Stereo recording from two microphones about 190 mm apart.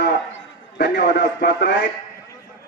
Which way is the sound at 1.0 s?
65° left (ahead or behind).